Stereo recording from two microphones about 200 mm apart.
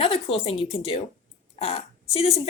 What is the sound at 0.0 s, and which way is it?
Speech, 30° left (ahead or behind).